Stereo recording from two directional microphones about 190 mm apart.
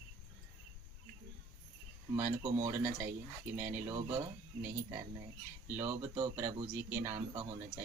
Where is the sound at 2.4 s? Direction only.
15° right (ahead or behind).